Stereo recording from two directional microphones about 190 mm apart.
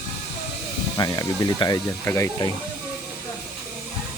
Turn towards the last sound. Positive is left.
turn(degrees=15)  # may be behind; listen again after turning